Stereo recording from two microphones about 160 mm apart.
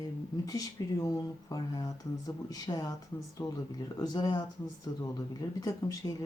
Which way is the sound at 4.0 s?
25° left (ahead or behind).